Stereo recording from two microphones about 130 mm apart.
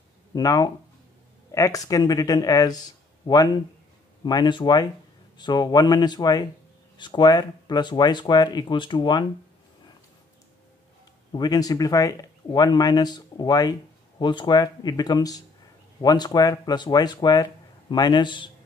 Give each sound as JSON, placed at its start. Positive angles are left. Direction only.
{"t": 0.3, "sound": "speech", "side_deg": 30}
{"t": 11.3, "sound": "speech", "side_deg": 30}